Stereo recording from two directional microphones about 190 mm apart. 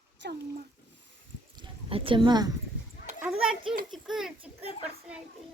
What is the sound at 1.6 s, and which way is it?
Speech, 30° right (ahead or behind).